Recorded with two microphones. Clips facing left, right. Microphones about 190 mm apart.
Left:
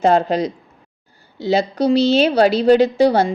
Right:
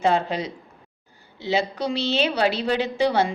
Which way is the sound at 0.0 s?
40° left (ahead or behind).